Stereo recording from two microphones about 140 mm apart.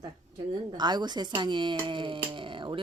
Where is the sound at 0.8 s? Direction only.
30° right (ahead or behind).